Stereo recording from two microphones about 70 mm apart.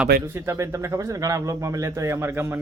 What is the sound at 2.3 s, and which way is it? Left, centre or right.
Speech, right.